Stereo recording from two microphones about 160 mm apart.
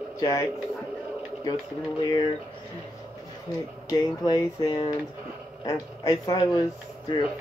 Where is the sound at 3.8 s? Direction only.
20° left (ahead or behind).